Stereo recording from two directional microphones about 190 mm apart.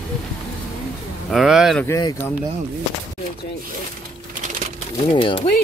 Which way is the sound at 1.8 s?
15° left (ahead or behind).